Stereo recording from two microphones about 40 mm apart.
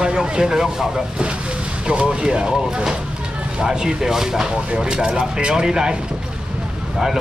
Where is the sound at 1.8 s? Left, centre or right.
Right.